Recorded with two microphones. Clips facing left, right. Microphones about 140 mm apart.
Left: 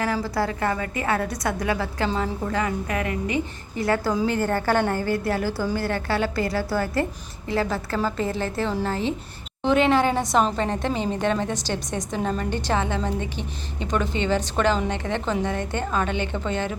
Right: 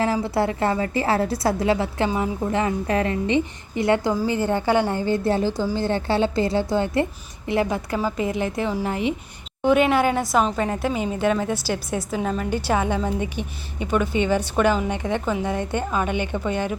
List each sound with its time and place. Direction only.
0.0 s a woman's voice: 25° right (ahead or behind)